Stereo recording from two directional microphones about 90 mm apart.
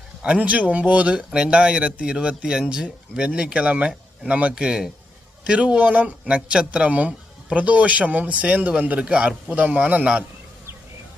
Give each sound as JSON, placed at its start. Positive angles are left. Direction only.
{"t": 0.2, "sound": "speech", "side_deg": -15}